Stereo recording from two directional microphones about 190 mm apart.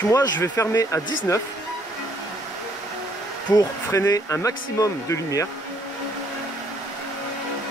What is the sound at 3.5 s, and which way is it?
Speech, 15° left (ahead or behind).